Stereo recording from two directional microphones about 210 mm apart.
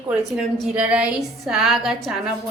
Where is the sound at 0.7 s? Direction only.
5° right (ahead or behind).